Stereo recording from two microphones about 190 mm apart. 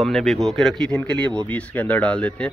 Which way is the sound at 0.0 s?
Centre (ahead or behind).